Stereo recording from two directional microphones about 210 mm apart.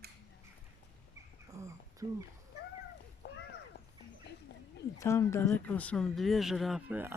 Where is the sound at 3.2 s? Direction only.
55° left (ahead or behind).